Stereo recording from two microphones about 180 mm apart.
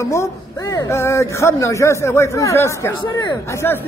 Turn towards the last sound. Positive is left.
turn(degrees=10)  # may be behind; listen again after turning